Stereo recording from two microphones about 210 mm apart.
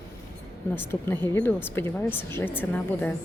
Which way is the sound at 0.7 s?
10° left (ahead or behind).